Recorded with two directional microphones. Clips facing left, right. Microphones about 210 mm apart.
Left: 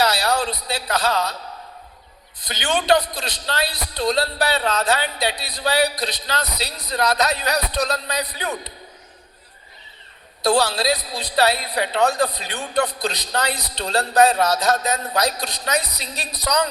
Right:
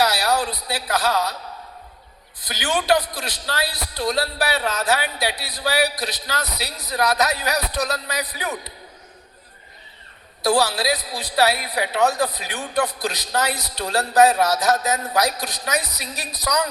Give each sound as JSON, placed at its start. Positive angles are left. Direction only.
{"t": 0.0, "sound": "a man's voice", "side_deg": 20}
{"t": 2.4, "sound": "a man's voice", "side_deg": 20}
{"t": 10.4, "sound": "a man's voice", "side_deg": 20}